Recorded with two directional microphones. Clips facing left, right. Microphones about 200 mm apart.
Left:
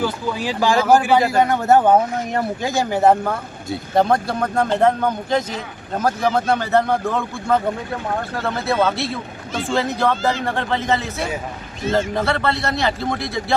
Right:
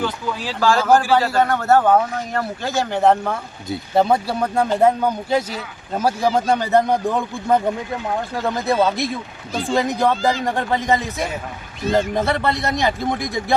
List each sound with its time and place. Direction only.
0.0 s a man's voice: 15° left (ahead or behind); by 13.4 s 15° right (ahead or behind)